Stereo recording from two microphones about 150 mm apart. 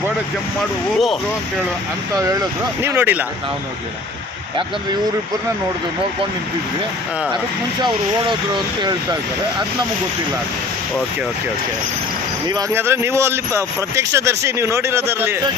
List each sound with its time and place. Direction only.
0.9 s speech: centre (ahead or behind)
2.1 s speech: 25° right (ahead or behind)
2.8 s a man's voice: 15° right (ahead or behind)
7.8 s speech: 30° right (ahead or behind)
12.7 s a man's voice: 15° right (ahead or behind)